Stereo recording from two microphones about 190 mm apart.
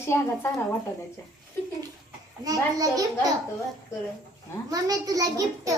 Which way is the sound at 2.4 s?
20° right (ahead or behind).